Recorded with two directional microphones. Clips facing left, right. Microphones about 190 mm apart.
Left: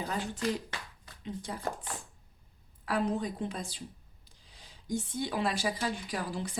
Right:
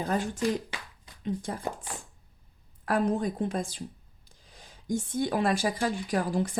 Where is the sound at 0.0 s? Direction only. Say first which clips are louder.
Right 6 dB; 50° right (ahead or behind).